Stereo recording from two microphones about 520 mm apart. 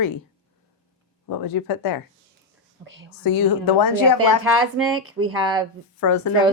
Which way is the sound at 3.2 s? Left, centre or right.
Left.